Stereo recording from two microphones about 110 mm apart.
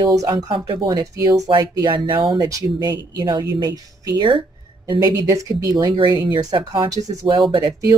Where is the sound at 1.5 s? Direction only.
40° right (ahead or behind).